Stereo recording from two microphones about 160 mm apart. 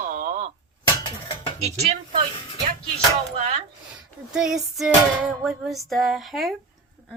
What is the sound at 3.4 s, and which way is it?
Speech, 40° right (ahead or behind).